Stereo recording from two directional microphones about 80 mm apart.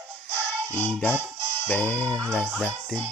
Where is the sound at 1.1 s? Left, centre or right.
Right.